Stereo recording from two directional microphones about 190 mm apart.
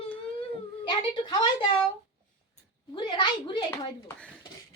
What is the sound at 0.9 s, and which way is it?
Speech, 25° left (ahead or behind).